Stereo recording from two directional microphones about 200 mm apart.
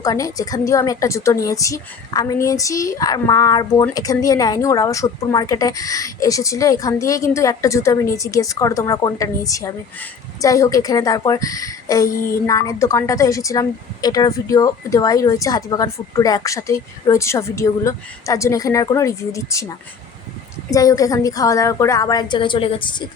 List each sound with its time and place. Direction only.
0.0 s a woman's voice: 15° left (ahead or behind)
20.7 s a woman's voice: 15° left (ahead or behind)